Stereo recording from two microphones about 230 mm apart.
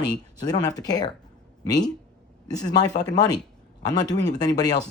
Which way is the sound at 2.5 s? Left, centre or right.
Centre.